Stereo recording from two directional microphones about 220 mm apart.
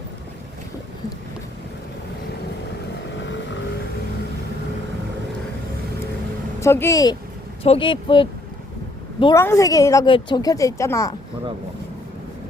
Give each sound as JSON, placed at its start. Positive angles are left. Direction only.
{"t": 6.6, "sound": "a woman's voice", "side_deg": 10}